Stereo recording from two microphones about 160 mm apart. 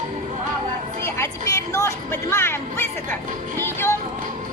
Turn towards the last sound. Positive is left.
turn(degrees=15)  # may be behind; listen again after turning